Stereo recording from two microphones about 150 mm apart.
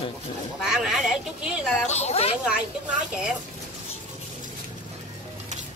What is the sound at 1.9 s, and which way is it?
Speech, 45° left (ahead or behind).